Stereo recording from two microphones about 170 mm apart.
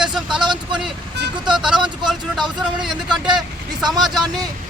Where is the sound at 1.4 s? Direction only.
5° right (ahead or behind).